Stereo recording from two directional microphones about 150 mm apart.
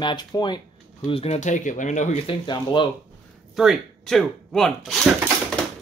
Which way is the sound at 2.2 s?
30° left (ahead or behind).